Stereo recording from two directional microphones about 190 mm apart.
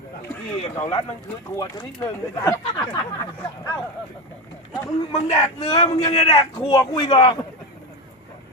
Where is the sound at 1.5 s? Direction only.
20° left (ahead or behind).